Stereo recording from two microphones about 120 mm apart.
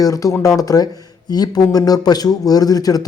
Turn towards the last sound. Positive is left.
turn(degrees=30)  # may be behind; listen again after turning